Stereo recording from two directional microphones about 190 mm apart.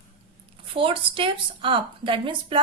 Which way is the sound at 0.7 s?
30° right (ahead or behind).